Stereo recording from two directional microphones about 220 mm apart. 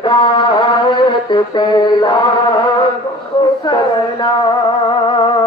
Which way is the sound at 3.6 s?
20° left (ahead or behind).